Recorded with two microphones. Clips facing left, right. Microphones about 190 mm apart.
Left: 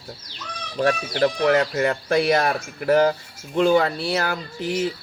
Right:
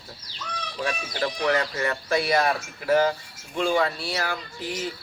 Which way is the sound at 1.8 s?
55° left (ahead or behind).